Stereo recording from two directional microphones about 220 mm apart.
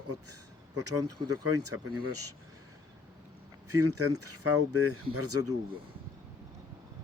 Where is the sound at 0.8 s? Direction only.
90° right.